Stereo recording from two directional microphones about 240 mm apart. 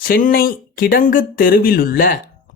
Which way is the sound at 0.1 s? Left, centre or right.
Left.